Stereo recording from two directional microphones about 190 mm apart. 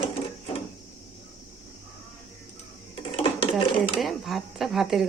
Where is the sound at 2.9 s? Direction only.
30° left (ahead or behind).